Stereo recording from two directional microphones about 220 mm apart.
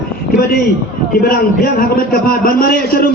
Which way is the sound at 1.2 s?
45° left (ahead or behind).